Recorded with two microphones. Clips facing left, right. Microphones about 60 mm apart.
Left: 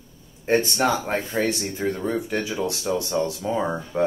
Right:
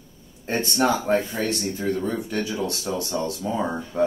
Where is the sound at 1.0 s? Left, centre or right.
Left.